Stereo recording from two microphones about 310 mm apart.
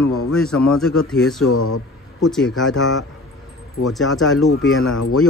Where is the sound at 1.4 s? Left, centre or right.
Left.